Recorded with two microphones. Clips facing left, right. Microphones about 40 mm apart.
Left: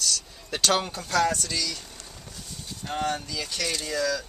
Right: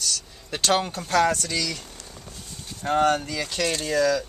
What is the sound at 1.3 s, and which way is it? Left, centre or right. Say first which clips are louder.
Speech: right 3 dB; right.